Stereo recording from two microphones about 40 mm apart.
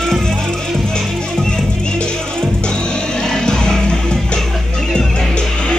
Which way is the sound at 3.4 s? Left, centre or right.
Centre.